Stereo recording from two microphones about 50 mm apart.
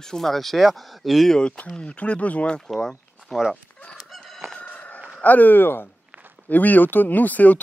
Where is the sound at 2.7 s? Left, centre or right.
Centre.